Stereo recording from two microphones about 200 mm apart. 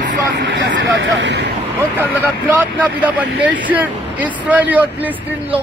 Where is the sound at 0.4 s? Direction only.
65° right (ahead or behind).